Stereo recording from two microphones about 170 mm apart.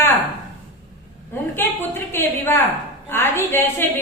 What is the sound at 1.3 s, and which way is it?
A woman's voice, 15° left (ahead or behind).